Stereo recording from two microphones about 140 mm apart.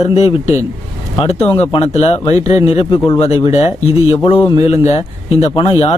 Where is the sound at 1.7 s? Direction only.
45° left (ahead or behind).